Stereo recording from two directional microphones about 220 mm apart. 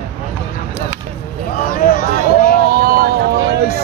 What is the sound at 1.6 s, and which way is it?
Speech, 40° left (ahead or behind).